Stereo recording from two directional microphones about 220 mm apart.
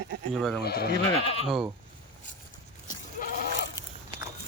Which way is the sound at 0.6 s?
45° left (ahead or behind).